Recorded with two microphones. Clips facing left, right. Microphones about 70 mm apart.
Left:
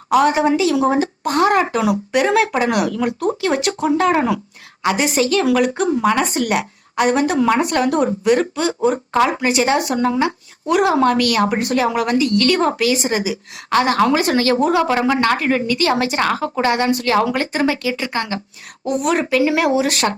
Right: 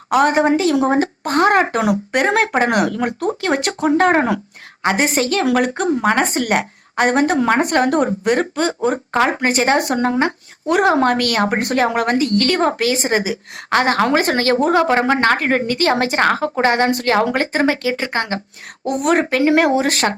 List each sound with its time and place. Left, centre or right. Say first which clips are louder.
0.1 s a woman's voice: even; right